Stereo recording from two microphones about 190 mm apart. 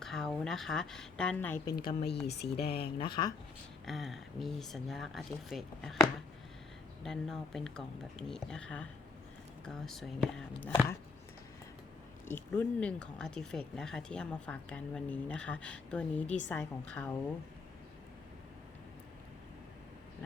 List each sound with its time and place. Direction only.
0.0 s speech: centre (ahead or behind)
1.7 s speech: 25° left (ahead or behind)
2.2 s speech: 60° left (ahead or behind)
2.8 s speech: 25° left (ahead or behind)
3.8 s speech: centre (ahead or behind)
7.0 s speech: centre (ahead or behind)
12.2 s a woman's voice: 10° left (ahead or behind)